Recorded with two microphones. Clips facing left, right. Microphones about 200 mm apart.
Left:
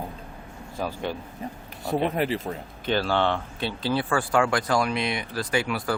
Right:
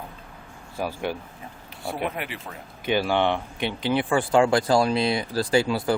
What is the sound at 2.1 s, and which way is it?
Speech, 35° left (ahead or behind).